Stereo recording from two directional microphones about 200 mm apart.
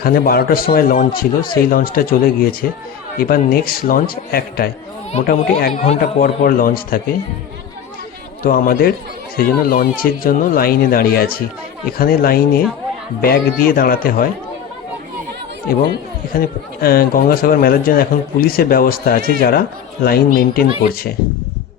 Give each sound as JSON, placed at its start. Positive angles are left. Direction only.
{"t": 0.0, "sound": "a man's voice", "side_deg": 50}
{"t": 5.8, "sound": "speech", "side_deg": 35}
{"t": 6.2, "sound": "a man's voice", "side_deg": 45}
{"t": 8.4, "sound": "a man's voice", "side_deg": 45}
{"t": 16.4, "sound": "a man's voice", "side_deg": 50}